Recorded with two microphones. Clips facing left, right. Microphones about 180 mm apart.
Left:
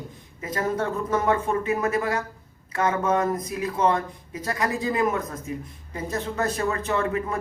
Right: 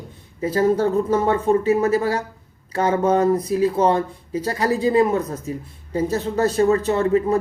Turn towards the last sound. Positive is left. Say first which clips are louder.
# right 7 dB
turn(degrees=-30)  # may be behind; listen again after turning